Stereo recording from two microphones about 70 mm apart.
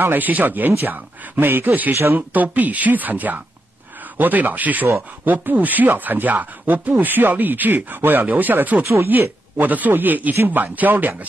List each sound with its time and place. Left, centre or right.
0.0 s speech: right